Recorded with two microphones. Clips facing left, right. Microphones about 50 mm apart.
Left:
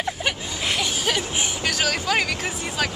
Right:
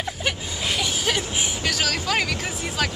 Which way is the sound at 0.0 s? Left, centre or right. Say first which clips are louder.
Left 1 dB; centre.